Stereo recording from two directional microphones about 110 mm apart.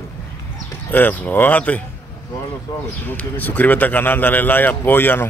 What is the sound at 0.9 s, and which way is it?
Speech, 15° left (ahead or behind).